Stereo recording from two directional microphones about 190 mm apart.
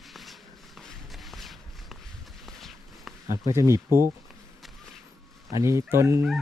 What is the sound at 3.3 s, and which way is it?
Speech, 15° right (ahead or behind).